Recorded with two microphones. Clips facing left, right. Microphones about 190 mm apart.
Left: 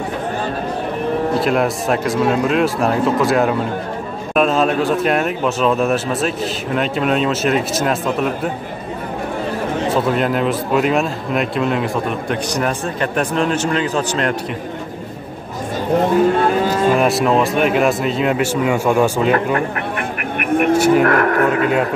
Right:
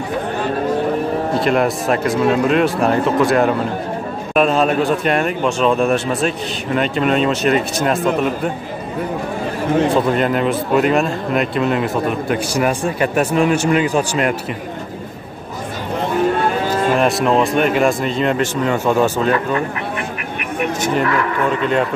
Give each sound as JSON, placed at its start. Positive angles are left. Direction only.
{"t": 1.4, "sound": "a man's voice", "side_deg": 0}
{"t": 9.8, "sound": "a man's voice", "side_deg": 0}
{"t": 16.9, "sound": "a man's voice", "side_deg": 0}
{"t": 20.3, "sound": "vehicle", "side_deg": 55}
{"t": 20.7, "sound": "speech", "side_deg": 10}
{"t": 21.0, "sound": "speech", "side_deg": 55}